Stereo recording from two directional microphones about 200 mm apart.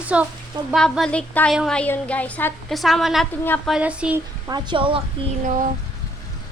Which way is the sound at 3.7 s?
5° right (ahead or behind).